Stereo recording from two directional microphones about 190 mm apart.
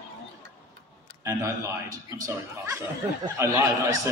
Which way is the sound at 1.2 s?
15° right (ahead or behind).